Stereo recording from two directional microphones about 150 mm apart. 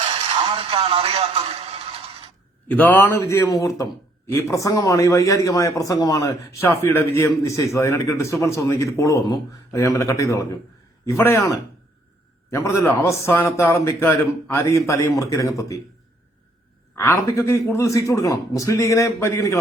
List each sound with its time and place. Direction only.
0.1 s a sound: 35° right (ahead or behind)
2.6 s a man's voice: 10° left (ahead or behind)
16.9 s a man's voice: 15° left (ahead or behind)